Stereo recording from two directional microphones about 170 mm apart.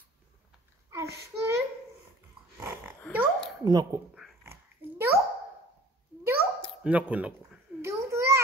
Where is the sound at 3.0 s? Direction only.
5° left (ahead or behind).